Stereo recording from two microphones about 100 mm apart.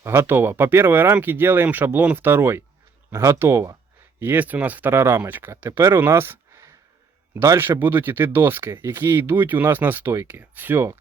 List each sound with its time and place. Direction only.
0.0 s speech: 25° right (ahead or behind)